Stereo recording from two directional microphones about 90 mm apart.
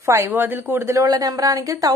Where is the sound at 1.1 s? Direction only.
45° right (ahead or behind).